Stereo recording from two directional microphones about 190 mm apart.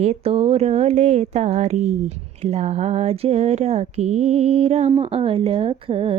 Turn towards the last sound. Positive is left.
turn(degrees=-30)  # may be behind; listen again after turning